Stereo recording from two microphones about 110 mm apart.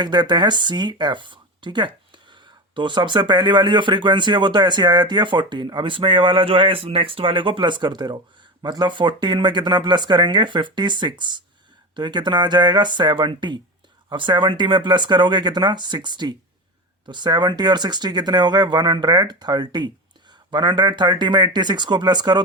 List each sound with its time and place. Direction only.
0.0 s speech: 40° right (ahead or behind)